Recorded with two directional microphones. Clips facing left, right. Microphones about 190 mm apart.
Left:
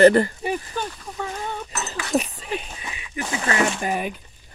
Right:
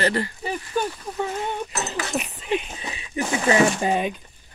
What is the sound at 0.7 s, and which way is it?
Speech, 20° right (ahead or behind).